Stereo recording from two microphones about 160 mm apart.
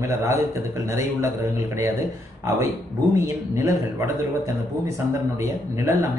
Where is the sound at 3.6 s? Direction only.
20° right (ahead or behind).